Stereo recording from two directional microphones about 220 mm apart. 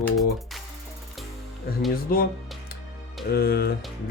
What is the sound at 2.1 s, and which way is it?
Speech, 40° left (ahead or behind).